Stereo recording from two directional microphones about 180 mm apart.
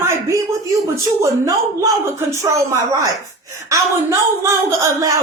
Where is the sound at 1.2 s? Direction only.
20° right (ahead or behind).